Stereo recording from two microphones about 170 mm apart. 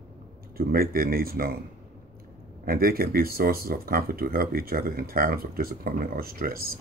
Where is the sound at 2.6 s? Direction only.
60° right (ahead or behind).